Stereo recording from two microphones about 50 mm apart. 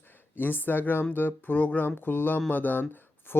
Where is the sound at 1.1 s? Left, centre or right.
Left.